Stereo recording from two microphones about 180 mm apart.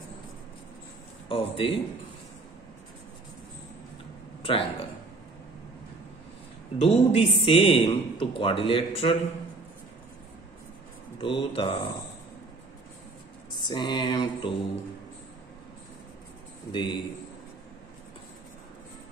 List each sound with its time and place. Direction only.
1.3 s speech: 30° left (ahead or behind)
4.4 s a sound: 30° left (ahead or behind)
6.8 s a man's voice: 35° left (ahead or behind)
11.1 s a man's voice: 30° left (ahead or behind)
13.6 s a man's voice: 25° left (ahead or behind)
16.7 s a man's voice: 25° left (ahead or behind)